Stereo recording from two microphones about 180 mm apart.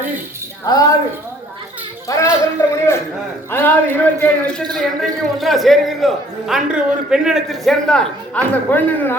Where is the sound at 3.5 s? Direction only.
10° left (ahead or behind).